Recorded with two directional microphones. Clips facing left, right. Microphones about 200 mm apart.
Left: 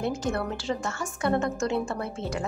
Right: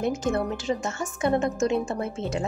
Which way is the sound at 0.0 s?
20° right (ahead or behind).